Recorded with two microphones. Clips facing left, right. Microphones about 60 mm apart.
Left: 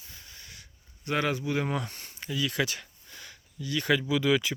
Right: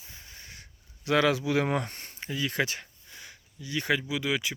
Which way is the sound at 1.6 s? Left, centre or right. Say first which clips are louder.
Right 3 dB; right.